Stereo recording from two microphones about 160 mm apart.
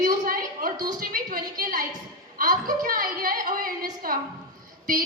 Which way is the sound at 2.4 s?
60° right (ahead or behind).